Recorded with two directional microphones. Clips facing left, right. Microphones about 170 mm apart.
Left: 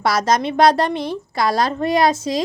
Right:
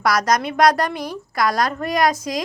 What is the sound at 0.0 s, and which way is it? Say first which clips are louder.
A woman's voice: left 1 dB; 25° left (ahead or behind).